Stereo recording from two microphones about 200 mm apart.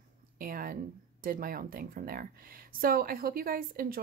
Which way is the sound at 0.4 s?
45° right (ahead or behind).